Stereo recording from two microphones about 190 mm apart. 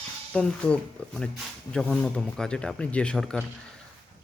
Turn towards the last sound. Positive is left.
turn(degrees=5)  # may be behind; listen again after turning